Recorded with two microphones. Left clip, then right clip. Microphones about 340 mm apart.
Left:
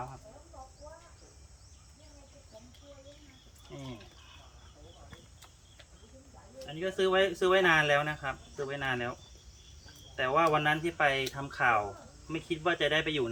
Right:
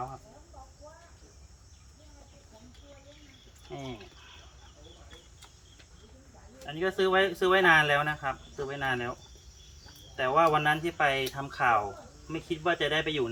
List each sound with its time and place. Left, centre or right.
6.7 s speech: centre
10.2 s speech: centre